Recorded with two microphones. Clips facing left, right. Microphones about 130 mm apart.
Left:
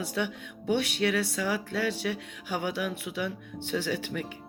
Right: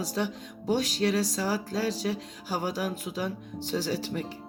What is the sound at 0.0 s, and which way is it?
Speech, 35° right (ahead or behind).